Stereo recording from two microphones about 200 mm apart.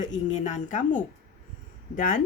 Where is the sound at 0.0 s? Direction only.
40° left (ahead or behind).